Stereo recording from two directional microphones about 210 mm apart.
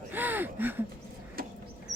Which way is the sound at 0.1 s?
10° right (ahead or behind).